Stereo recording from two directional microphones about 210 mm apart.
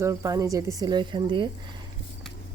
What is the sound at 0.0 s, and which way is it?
Speech, 15° right (ahead or behind).